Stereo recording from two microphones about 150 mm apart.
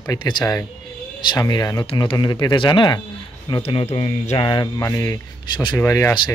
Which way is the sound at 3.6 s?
40° left (ahead or behind).